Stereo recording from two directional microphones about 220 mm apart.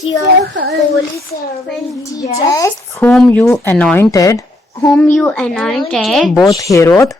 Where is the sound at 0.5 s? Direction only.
50° right (ahead or behind).